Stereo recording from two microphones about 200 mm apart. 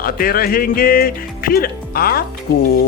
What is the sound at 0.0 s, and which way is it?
Speech, 45° left (ahead or behind).